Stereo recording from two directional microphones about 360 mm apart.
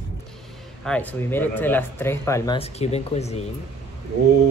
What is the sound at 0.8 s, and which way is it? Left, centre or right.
Speech, centre.